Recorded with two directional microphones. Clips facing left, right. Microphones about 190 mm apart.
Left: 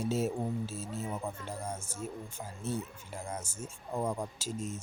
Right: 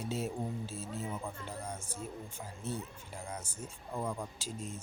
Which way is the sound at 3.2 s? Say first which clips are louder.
Left 2 dB; 45° left (ahead or behind).